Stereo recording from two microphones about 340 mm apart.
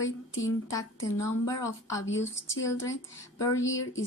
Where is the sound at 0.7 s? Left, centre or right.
Centre.